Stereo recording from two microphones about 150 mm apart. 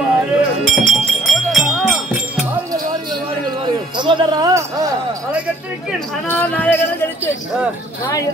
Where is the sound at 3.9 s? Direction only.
30° right (ahead or behind).